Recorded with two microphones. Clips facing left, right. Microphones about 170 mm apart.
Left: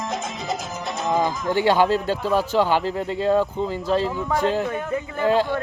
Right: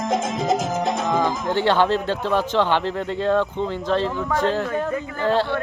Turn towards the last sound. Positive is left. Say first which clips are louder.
# left 1 dB
turn(degrees=10)  # may be behind; listen again after turning